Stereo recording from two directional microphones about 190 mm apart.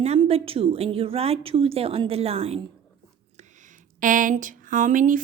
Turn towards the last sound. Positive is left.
turn(degrees=-45)  # may be behind; listen again after turning